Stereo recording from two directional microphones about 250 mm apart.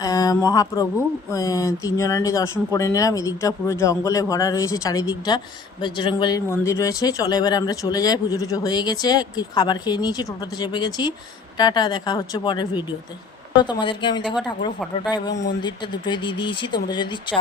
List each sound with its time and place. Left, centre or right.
0.0 s speech: centre
15.6 s speech: centre